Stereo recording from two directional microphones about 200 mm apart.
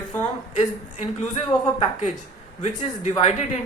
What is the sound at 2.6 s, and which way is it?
A woman's voice, 35° left (ahead or behind).